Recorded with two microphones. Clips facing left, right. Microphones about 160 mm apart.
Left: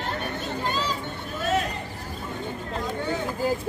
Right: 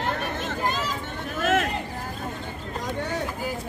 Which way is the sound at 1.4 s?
90° right.